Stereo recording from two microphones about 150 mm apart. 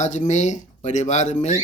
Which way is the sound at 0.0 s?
55° left (ahead or behind).